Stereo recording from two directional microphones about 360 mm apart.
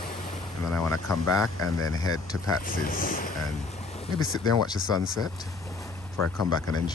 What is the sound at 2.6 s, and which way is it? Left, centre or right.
Speech, left.